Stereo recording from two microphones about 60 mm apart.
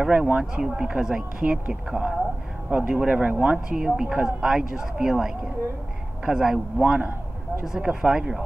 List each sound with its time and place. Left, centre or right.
0.1 s speech: right
0.6 s speech: centre
2.7 s speech: right; by 8.4 s centre